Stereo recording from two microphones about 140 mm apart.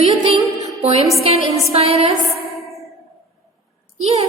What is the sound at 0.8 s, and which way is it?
A woman's voice, 45° right (ahead or behind).